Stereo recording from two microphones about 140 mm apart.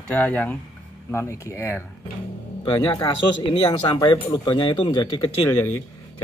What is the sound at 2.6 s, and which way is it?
Speech, 30° left (ahead or behind).